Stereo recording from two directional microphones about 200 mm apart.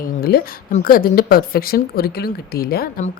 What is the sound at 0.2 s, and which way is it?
A woman's voice, 50° left (ahead or behind).